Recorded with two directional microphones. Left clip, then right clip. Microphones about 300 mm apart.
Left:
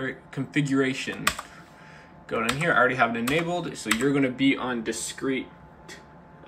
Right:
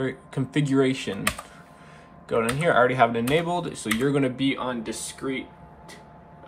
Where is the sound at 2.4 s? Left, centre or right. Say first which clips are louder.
Right 1 dB; centre.